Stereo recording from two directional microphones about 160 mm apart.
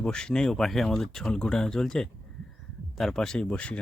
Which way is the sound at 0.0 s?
5° left (ahead or behind).